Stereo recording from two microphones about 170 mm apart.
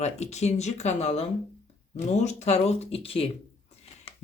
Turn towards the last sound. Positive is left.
turn(degrees=35)  # may be behind; listen again after turning